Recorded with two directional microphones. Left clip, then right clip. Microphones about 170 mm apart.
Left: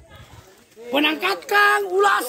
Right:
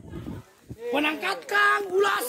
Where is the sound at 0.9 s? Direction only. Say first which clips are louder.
Left 6 dB; 45° left (ahead or behind).